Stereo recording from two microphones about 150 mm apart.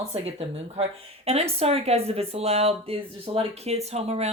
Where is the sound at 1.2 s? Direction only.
45° right (ahead or behind).